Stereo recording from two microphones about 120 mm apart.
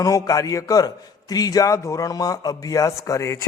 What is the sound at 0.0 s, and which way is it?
A man's voice, 30° left (ahead or behind).